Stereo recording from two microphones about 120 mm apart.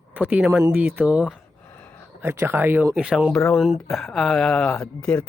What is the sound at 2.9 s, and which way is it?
Speech, 5° right (ahead or behind).